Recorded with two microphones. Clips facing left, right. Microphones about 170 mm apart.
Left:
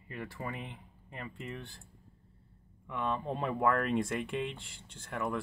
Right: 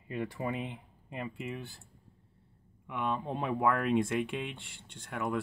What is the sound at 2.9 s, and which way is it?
Speech, centre (ahead or behind).